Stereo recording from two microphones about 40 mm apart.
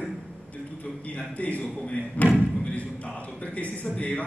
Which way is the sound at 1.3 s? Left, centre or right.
Left.